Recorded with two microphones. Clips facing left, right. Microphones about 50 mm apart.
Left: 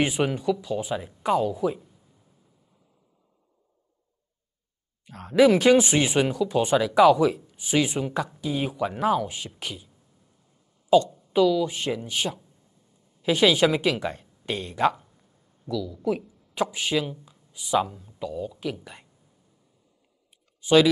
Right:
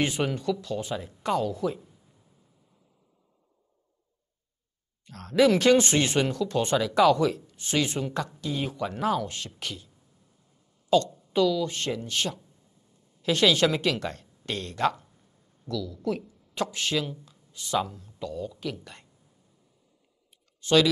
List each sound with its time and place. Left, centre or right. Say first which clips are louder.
0.0 s speech: left 3 dB; centre
5.0 s speech: left 3 dB; centre
20.6 s speech: left 3 dB; centre